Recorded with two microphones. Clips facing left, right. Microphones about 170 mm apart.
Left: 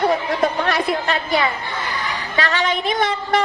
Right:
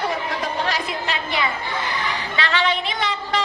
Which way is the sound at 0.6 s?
55° left (ahead or behind).